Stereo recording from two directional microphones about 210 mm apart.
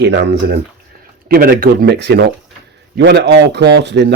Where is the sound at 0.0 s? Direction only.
55° right (ahead or behind).